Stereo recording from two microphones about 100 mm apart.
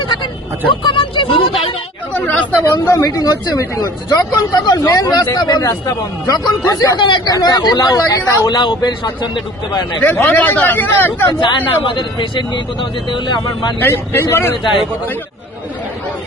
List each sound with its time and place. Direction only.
0.7 s speech: 55° left (ahead or behind)
2.1 s chatter: 15° left (ahead or behind)
2.8 s speech: 35° left (ahead or behind)
8.4 s speech: 50° left (ahead or behind)
10.0 s speech: 15° left (ahead or behind)
11.3 s speech: 50° left (ahead or behind)
13.7 s speech: 20° left (ahead or behind)
14.6 s a man's voice: 55° left (ahead or behind)